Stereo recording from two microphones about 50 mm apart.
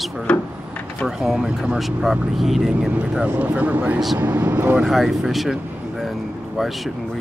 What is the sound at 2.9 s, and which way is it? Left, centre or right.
Speech, right.